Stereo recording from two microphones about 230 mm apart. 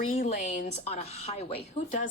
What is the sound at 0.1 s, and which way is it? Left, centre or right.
A woman's voice, left.